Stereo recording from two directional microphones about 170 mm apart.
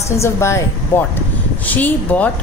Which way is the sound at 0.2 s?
15° left (ahead or behind).